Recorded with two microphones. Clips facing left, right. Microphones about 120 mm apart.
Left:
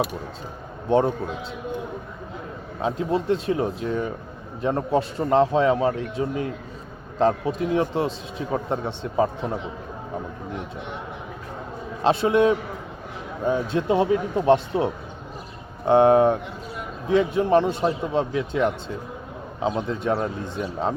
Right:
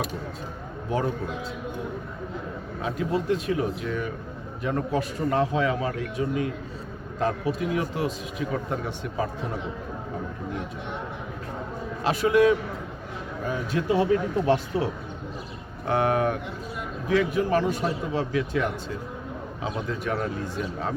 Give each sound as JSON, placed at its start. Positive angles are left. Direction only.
{"t": 0.9, "sound": "a man's voice", "side_deg": 30}
{"t": 2.8, "sound": "a man's voice", "side_deg": 30}
{"t": 12.0, "sound": "a man's voice", "side_deg": 25}
{"t": 15.9, "sound": "a man's voice", "side_deg": 25}